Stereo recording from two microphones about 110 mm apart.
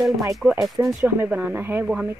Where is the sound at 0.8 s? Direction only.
25° right (ahead or behind).